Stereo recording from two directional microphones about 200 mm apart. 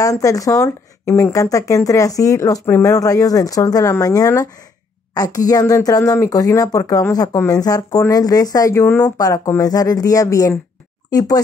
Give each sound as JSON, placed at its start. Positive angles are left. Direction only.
{"t": 0.0, "sound": "a woman's voice", "side_deg": 15}